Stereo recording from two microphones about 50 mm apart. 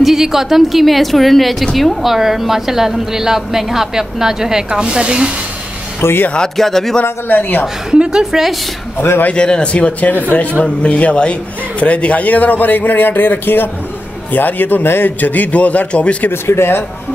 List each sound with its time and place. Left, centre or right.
0.0 s a woman's voice: centre
5.9 s speech: left
6.5 s speech: centre
7.0 s a man's voice: left
8.0 s a woman's voice: centre
9.3 s a man's voice: centre
16.3 s speech: left